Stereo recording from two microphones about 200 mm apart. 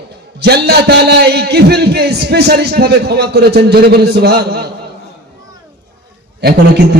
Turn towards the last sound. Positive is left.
turn(degrees=-55)  # may be behind; listen again after turning